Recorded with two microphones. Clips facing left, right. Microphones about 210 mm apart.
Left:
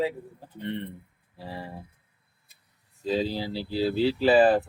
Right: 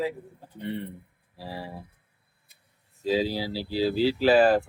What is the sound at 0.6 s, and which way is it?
Speech, 5° right (ahead or behind).